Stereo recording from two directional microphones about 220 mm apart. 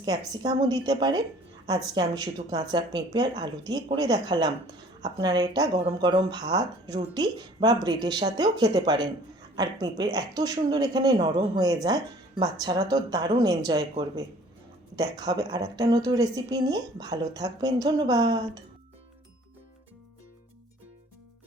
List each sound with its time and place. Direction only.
0.3 s speech: 20° right (ahead or behind)